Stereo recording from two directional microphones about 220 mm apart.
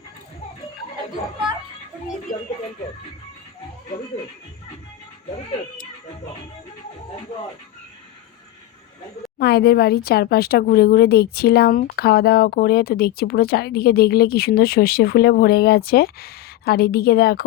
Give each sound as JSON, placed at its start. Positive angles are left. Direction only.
{"t": 9.4, "sound": "speech", "side_deg": 45}